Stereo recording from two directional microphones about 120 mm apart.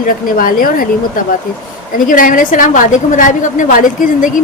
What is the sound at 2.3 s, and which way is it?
A woman's voice, 90° left.